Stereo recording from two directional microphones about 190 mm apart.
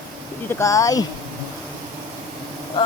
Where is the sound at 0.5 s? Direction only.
15° left (ahead or behind).